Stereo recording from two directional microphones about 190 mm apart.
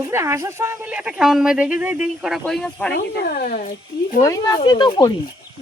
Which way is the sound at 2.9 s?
50° left (ahead or behind).